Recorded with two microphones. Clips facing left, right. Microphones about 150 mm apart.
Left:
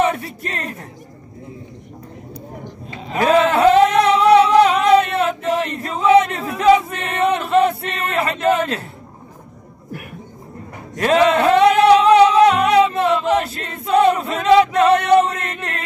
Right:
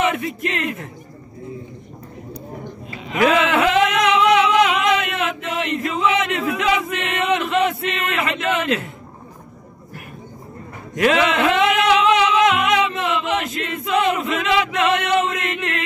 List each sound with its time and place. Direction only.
0.0 s speech: 30° left (ahead or behind)
3.1 s singing: 35° left (ahead or behind)
11.0 s music: 35° left (ahead or behind)